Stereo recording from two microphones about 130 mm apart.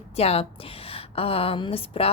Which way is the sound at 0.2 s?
50° left (ahead or behind).